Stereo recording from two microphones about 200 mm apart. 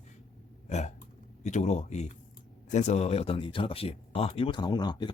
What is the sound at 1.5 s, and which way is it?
Speech, 35° left (ahead or behind).